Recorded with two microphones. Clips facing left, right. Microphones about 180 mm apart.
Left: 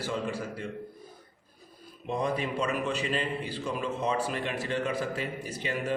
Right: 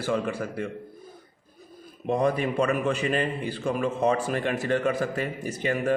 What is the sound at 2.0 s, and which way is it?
A man's voice, 55° right (ahead or behind).